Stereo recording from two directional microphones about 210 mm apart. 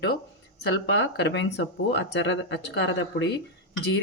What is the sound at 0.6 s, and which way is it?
Speech, 55° left (ahead or behind).